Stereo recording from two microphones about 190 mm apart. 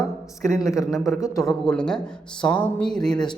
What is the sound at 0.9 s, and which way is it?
A man's voice, centre (ahead or behind).